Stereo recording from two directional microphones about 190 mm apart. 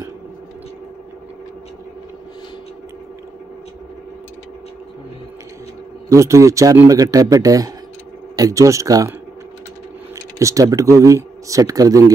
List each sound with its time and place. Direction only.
6.0 s a man's voice: 15° right (ahead or behind)
10.1 s speech: 15° right (ahead or behind)